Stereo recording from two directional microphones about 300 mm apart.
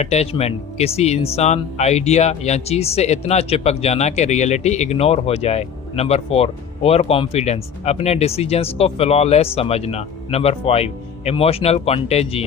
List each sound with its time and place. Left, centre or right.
0.0 s speech: left